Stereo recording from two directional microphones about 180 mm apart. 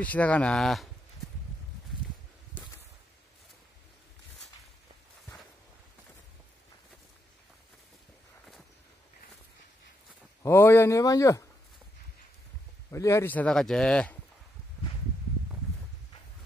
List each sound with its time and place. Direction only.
0.0 s speech: 10° left (ahead or behind)
10.4 s speech: 15° left (ahead or behind)
12.9 s speech: 15° left (ahead or behind)